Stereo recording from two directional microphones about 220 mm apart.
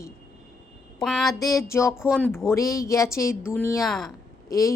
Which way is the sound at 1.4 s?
15° left (ahead or behind).